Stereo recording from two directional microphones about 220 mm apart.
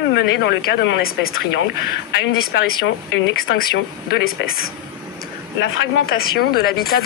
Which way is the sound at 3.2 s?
55° left (ahead or behind).